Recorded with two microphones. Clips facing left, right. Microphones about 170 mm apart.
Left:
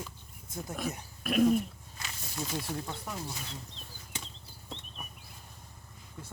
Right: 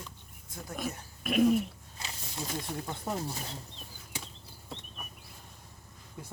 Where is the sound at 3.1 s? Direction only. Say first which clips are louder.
Right 6 dB; 25° right (ahead or behind).